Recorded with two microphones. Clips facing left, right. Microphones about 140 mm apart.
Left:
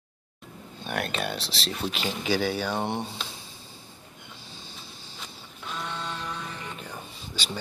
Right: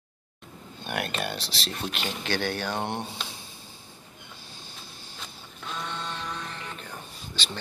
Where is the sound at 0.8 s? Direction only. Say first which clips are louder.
Left 1 dB; centre (ahead or behind).